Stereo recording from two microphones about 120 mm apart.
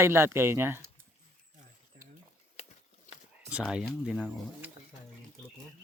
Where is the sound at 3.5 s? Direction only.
10° right (ahead or behind).